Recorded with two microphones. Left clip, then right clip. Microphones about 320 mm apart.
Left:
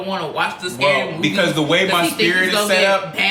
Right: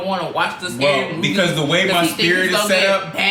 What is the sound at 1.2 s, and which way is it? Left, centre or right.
Speech, centre.